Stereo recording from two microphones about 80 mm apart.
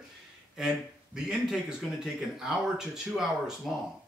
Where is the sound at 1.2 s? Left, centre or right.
Centre.